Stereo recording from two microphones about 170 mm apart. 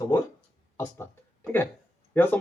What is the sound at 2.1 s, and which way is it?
Speech, 10° left (ahead or behind).